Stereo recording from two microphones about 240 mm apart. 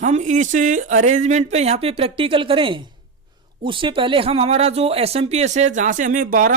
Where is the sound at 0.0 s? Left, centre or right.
Right.